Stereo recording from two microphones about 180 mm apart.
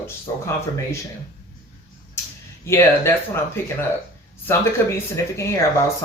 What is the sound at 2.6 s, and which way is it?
Speech, 15° left (ahead or behind).